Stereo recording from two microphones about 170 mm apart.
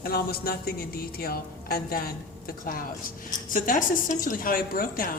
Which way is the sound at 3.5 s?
50° left (ahead or behind).